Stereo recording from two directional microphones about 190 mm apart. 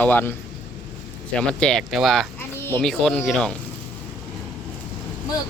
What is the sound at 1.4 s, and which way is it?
Speech, 5° left (ahead or behind).